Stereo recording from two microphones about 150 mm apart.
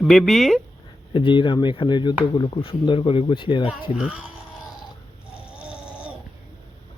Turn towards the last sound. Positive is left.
turn(degrees=-10)  # may be behind; listen again after turning